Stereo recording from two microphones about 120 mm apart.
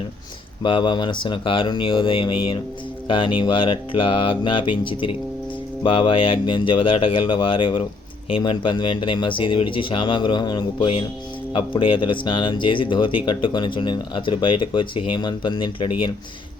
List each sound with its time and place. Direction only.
0.6 s speech: 40° left (ahead or behind)